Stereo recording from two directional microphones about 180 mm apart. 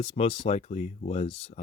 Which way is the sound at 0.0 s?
30° left (ahead or behind).